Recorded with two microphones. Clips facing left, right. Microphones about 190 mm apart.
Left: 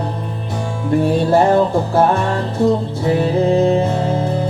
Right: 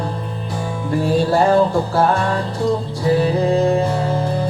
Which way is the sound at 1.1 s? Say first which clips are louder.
Left 1 dB; 20° left (ahead or behind).